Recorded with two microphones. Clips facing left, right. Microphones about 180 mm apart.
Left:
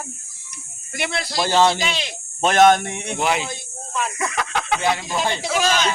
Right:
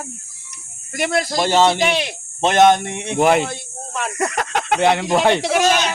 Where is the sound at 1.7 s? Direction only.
60° right (ahead or behind).